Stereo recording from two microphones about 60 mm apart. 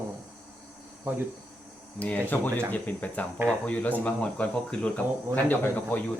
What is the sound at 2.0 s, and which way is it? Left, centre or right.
Speech, left.